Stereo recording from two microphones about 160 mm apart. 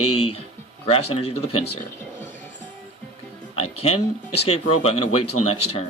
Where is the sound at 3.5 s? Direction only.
40° left (ahead or behind).